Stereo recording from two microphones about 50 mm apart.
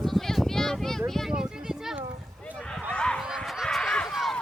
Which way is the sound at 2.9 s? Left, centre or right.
Left.